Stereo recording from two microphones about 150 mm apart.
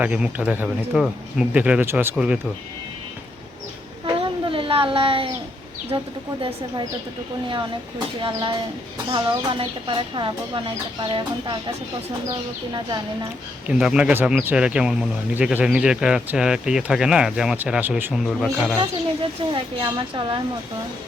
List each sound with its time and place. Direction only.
0.0 s speech: 10° right (ahead or behind)
4.0 s chicken: 35° right (ahead or behind)
5.9 s speech: 30° right (ahead or behind)
7.5 s speech: 30° right (ahead or behind)
13.7 s a man's voice: 5° right (ahead or behind)
18.3 s a man's voice: centre (ahead or behind)
19.5 s speech: 35° right (ahead or behind)